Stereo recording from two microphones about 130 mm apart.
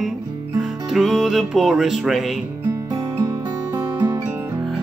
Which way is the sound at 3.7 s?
30° right (ahead or behind).